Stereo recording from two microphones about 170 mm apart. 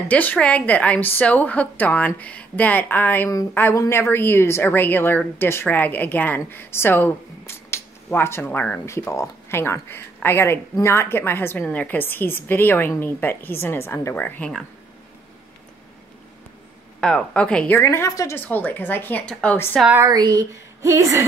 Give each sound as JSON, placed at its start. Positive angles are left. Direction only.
{"t": 0.1, "sound": "a woman's voice", "side_deg": 10}
{"t": 17.0, "sound": "a woman's voice", "side_deg": 5}
{"t": 20.0, "sound": "a woman's voice", "side_deg": -25}